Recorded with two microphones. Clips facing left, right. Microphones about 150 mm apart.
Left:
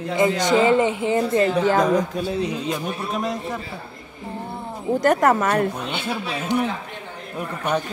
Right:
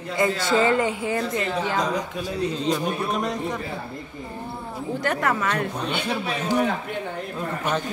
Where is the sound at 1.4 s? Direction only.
50° left (ahead or behind).